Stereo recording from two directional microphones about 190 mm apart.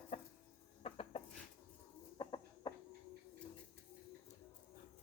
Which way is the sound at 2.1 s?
25° left (ahead or behind).